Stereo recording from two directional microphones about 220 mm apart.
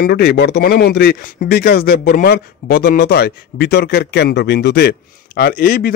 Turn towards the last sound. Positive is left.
turn(degrees=40)  # may be behind; listen again after turning